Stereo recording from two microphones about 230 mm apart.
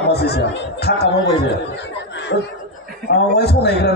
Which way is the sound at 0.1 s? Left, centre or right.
Left.